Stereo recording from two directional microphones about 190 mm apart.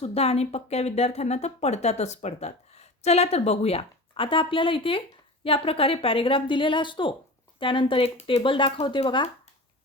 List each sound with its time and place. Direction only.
0.0 s speech: 35° left (ahead or behind)